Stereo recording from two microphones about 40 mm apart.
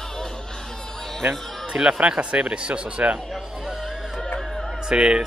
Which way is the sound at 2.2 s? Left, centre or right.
Right.